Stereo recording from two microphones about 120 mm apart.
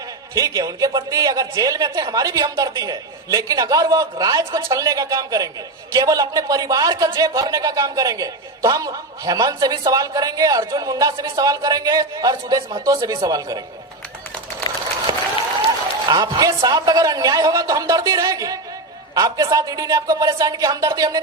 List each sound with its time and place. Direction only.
0.3 s a woman's voice: 30° right (ahead or behind)
15.1 s applause: 30° right (ahead or behind)
16.0 s a woman's voice: 35° right (ahead or behind)